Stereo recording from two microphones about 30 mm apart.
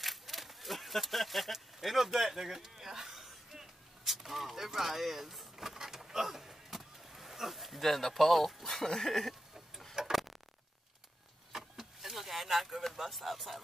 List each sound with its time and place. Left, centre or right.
0.0 s a sound: centre
4.6 s vehicle: centre
8.6 s speech: centre
10.0 s a sound: centre
11.5 s vehicle: centre
13.1 s speech: centre